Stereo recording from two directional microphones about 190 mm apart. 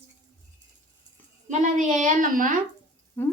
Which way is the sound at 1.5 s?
40° right (ahead or behind).